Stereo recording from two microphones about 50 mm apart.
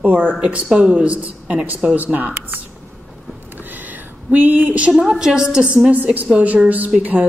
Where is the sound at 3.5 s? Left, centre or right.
Right.